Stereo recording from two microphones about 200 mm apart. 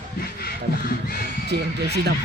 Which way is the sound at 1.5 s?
55° right (ahead or behind).